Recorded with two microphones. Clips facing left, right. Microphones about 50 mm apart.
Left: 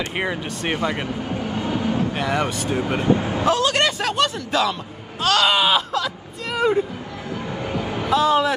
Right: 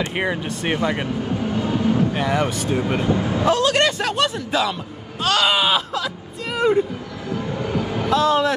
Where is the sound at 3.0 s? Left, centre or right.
Left.